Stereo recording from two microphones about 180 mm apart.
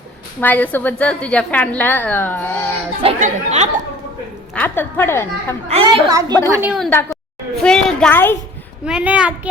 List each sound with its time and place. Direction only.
0.3 s a woman's voice: 10° left (ahead or behind)
3.2 s speech: 40° right (ahead or behind)
4.5 s a woman's voice: 10° left (ahead or behind)
5.7 s a woman's voice: 25° right (ahead or behind)
6.5 s a woman's voice: 10° right (ahead or behind)
6.7 s a woman's voice: centre (ahead or behind)
8.8 s a woman's voice: 5° right (ahead or behind)